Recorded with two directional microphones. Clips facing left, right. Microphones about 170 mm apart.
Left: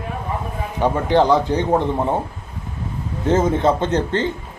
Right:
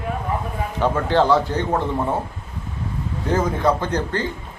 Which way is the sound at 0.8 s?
15° left (ahead or behind).